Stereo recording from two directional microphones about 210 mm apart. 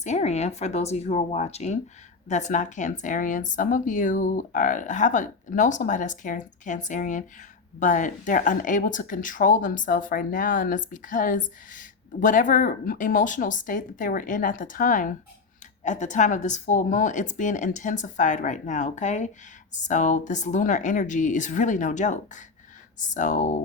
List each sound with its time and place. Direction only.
0.0 s speech: 35° left (ahead or behind)